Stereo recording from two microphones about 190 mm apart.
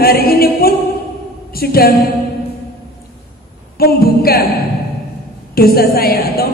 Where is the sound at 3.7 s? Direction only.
55° left (ahead or behind).